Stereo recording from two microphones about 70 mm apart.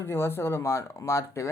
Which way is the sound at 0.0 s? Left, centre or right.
Left.